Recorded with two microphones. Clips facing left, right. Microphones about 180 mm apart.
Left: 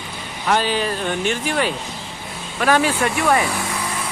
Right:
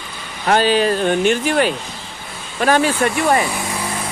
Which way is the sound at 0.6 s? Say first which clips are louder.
Right 6 dB; 90° right.